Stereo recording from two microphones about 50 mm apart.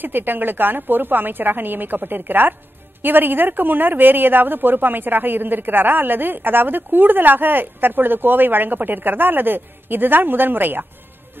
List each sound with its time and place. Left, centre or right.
0.0 s speech: right